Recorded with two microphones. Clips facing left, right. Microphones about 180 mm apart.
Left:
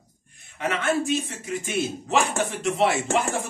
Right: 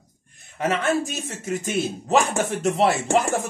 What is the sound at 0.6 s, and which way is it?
Speech, 40° right (ahead or behind).